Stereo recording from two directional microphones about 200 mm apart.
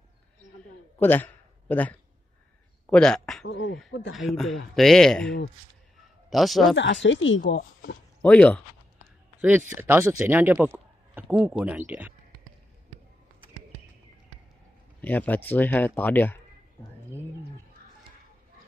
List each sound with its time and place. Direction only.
1.0 s speech: 10° left (ahead or behind)
3.4 s speech: 70° left (ahead or behind)
4.3 s speech: centre (ahead or behind)
6.3 s speech: centre (ahead or behind)
6.7 s speech: 65° left (ahead or behind)
8.2 s speech: 5° left (ahead or behind)
9.4 s speech: 5° right (ahead or behind)
15.0 s speech: 10° left (ahead or behind)